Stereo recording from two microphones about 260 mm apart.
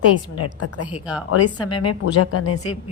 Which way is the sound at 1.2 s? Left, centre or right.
Left.